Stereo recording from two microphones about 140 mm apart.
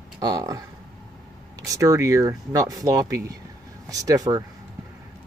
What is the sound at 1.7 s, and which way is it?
Speech, 20° right (ahead or behind).